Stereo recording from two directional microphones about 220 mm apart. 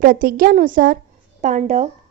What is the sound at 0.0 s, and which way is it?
A woman's voice, 40° right (ahead or behind).